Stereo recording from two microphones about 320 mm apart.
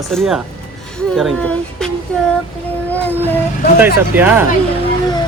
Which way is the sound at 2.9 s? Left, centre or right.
Centre.